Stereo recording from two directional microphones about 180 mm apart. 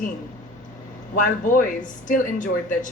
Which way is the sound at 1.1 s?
45° left (ahead or behind).